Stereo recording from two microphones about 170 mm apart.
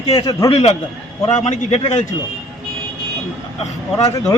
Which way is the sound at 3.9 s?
20° left (ahead or behind).